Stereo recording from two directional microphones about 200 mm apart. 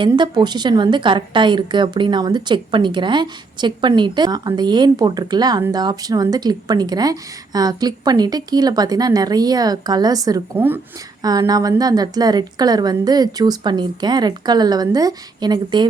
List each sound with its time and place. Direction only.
0.0 s a woman's voice: 25° right (ahead or behind)